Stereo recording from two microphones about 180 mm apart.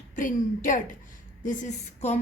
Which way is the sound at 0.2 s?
45° left (ahead or behind).